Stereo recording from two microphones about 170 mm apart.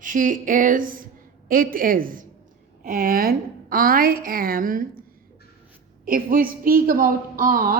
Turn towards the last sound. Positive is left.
turn(degrees=-55)  # may be behind; listen again after turning